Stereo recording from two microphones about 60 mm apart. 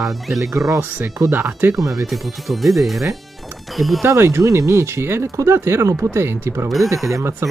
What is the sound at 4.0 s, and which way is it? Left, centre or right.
Speech, right.